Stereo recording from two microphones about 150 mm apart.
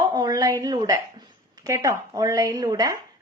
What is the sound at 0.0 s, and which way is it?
A woman's voice, 30° right (ahead or behind).